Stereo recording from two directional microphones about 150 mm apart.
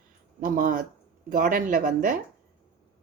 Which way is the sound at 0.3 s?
60° right (ahead or behind).